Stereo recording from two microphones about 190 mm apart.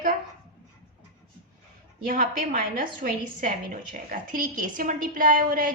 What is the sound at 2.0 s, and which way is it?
A woman's voice, 45° right (ahead or behind).